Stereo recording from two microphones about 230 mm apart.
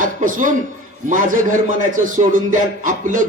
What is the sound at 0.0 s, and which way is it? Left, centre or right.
A man's voice, right.